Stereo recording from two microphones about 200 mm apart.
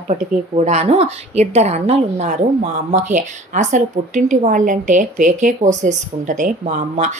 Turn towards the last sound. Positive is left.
turn(degrees=-40)  # may be behind; listen again after turning